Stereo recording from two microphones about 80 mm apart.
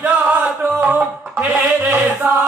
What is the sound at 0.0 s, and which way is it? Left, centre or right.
Music, right.